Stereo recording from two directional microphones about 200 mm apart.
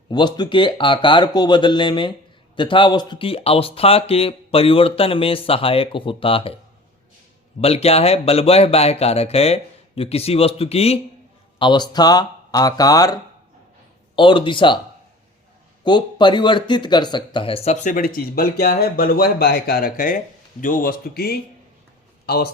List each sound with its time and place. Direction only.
0.1 s speech: 20° left (ahead or behind)
7.6 s speech: 30° left (ahead or behind)
14.2 s speech: 25° left (ahead or behind)
15.8 s speech: 20° left (ahead or behind); by 21.3 s 50° left (ahead or behind)